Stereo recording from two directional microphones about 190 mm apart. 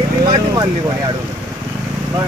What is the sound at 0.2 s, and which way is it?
Vehicle, 20° right (ahead or behind).